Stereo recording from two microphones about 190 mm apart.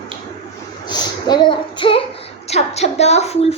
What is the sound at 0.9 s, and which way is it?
A woman's voice, 25° left (ahead or behind).